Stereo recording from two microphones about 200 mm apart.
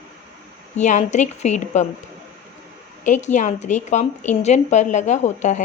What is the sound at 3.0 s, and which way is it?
A woman's voice, 35° left (ahead or behind).